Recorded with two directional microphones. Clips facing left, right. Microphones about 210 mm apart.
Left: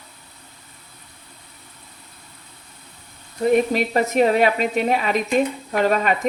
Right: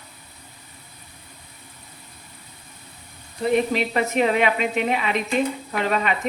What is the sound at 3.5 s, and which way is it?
Speech, 40° left (ahead or behind).